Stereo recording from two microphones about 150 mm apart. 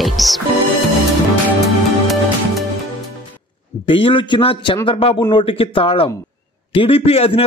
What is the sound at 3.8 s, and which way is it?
A man's voice, 35° left (ahead or behind).